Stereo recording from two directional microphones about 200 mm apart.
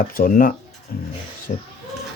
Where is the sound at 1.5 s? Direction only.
35° left (ahead or behind).